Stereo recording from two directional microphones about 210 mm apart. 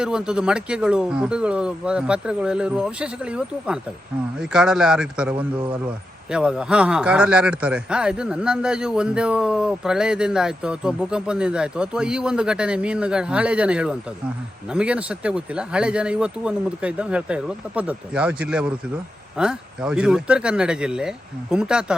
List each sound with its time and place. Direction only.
0.0 s speech: 5° right (ahead or behind)